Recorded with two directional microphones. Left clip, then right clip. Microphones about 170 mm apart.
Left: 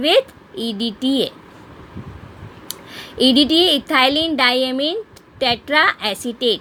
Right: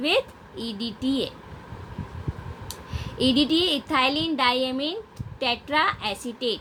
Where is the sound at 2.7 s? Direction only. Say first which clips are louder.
Left 8 dB; 55° left (ahead or behind).